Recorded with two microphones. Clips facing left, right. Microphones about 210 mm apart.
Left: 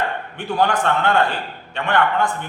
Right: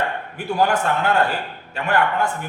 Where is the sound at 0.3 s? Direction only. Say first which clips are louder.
Even; 5° right (ahead or behind).